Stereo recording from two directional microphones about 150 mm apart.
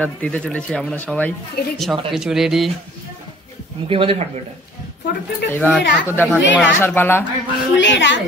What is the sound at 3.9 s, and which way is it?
Speech, 35° right (ahead or behind).